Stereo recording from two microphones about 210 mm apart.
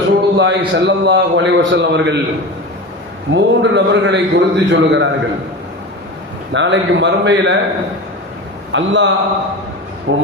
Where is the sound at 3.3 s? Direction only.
60° right (ahead or behind).